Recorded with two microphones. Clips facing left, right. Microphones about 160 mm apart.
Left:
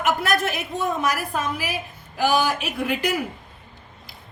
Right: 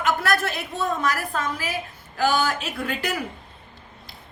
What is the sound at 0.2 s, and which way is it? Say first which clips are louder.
A woman's voice: left 1 dB; 15° left (ahead or behind).